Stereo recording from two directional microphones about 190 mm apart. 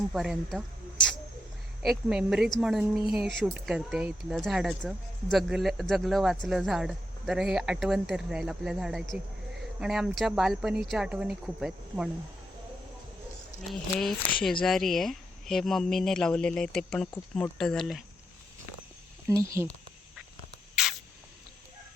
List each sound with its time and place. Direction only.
0.1 s speech: 5° right (ahead or behind)
13.6 s speech: centre (ahead or behind)
19.3 s speech: 15° right (ahead or behind)